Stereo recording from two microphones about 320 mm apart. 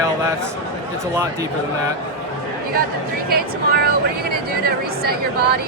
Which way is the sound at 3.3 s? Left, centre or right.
Right.